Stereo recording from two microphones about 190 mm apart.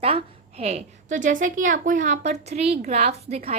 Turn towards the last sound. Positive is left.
turn(degrees=-35)  # may be behind; listen again after turning